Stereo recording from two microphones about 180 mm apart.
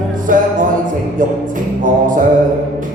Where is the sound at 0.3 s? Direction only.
50° right (ahead or behind).